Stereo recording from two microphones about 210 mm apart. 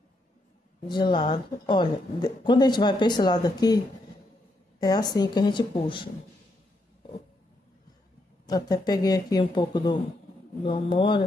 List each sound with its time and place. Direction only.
0.8 s a woman's voice: 20° left (ahead or behind)
8.5 s a woman's voice: 15° left (ahead or behind)